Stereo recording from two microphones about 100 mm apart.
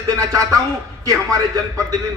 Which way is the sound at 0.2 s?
35° right (ahead or behind).